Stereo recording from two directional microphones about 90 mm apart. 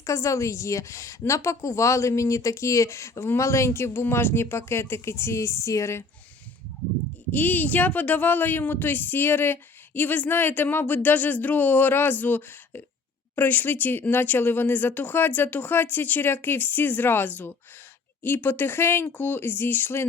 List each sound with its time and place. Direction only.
0.0 s a woman's voice: 35° left (ahead or behind)
7.3 s speech: 20° left (ahead or behind)